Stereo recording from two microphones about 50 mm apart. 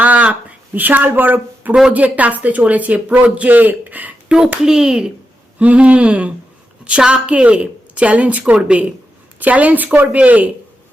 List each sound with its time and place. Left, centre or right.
0.0 s a sound: right
1.9 s speech: right
4.3 s a child's voice: centre
5.5 s speech: right